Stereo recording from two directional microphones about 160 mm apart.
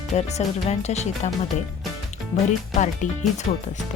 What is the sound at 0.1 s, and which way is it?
Speech, 45° left (ahead or behind).